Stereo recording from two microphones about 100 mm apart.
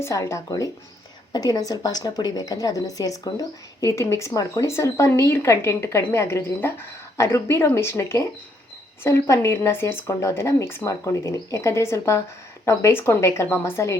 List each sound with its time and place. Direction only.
0.0 s a woman's voice: 30° left (ahead or behind)